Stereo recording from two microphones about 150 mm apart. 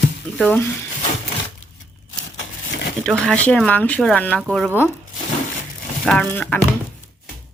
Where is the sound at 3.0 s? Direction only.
5° left (ahead or behind).